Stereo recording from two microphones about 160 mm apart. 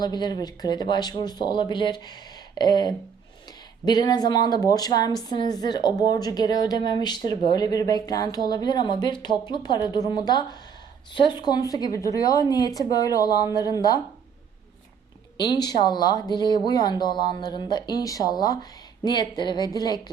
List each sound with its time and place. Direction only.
0.0 s a woman's voice: 25° left (ahead or behind)
15.4 s a woman's voice: 25° left (ahead or behind)